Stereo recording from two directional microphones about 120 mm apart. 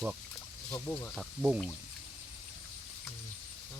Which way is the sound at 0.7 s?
10° left (ahead or behind).